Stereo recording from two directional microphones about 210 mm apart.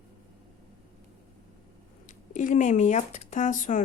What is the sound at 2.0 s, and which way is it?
Speech, 35° left (ahead or behind).